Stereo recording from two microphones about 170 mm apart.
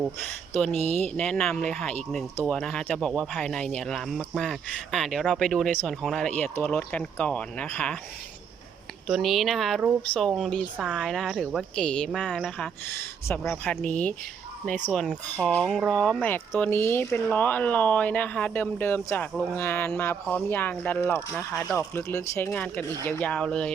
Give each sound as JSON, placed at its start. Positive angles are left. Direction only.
{"t": 0.7, "sound": "speech", "side_deg": -40}
{"t": 1.1, "sound": "speech", "side_deg": 5}
{"t": 9.0, "sound": "speech", "side_deg": 0}
{"t": 17.1, "sound": "speech", "side_deg": 0}